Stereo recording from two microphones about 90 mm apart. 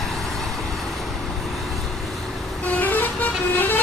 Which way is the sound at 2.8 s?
20° left (ahead or behind).